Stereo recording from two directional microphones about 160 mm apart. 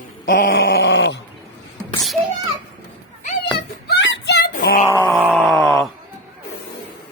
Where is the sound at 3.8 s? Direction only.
90° left; by 4.8 s 70° left (ahead or behind).